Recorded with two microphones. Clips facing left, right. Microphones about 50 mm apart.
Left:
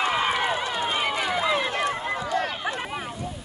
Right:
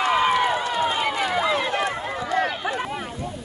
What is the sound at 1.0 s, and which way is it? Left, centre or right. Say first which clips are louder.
Run: right 2 dB; centre.